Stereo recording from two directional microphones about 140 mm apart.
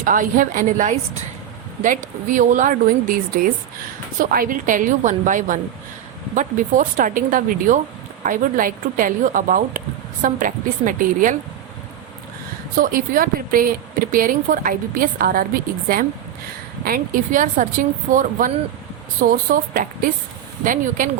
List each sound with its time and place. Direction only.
0.0 s speech: 75° right (ahead or behind)
12.8 s a woman's voice: 85° right
16.8 s speech: 80° right
19.3 s speech: 85° right
20.7 s speech: 70° right (ahead or behind)